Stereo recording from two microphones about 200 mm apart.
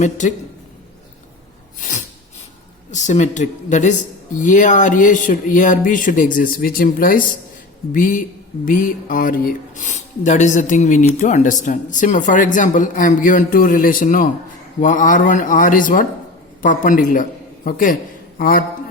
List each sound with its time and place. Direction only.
0.0 s speech: 35° left (ahead or behind)
1.8 s a man's voice: 35° left (ahead or behind)